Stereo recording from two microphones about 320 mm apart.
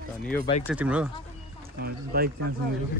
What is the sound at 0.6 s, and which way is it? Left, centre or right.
Speech, centre.